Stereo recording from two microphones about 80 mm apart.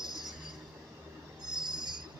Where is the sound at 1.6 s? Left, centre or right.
Right.